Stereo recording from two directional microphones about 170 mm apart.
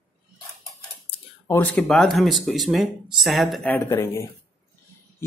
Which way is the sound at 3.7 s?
15° left (ahead or behind).